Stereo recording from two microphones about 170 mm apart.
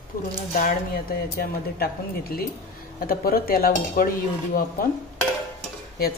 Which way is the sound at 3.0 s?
60° left (ahead or behind).